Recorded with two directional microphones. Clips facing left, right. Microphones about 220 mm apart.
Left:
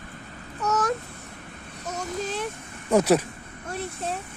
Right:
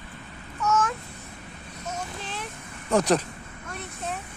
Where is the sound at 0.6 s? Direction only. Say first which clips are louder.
Even; 35° left (ahead or behind).